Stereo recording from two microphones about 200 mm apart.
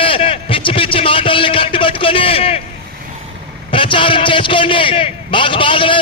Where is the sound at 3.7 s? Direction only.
25° left (ahead or behind).